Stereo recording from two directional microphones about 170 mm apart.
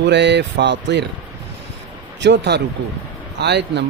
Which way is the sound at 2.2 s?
90° right.